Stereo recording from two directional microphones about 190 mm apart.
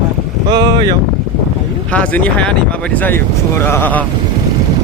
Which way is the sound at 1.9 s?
5° left (ahead or behind).